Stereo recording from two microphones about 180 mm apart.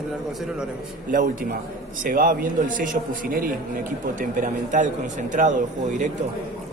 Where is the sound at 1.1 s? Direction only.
50° right (ahead or behind).